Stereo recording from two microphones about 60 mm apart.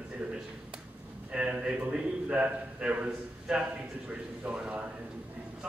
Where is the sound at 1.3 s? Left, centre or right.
Centre.